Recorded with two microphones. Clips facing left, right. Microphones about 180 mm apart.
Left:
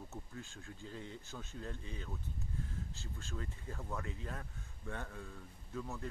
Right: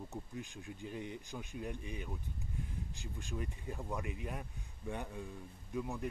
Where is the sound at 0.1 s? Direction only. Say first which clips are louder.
Right 4 dB; 15° right (ahead or behind).